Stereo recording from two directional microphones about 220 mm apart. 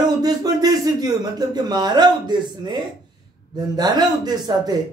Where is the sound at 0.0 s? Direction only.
15° right (ahead or behind).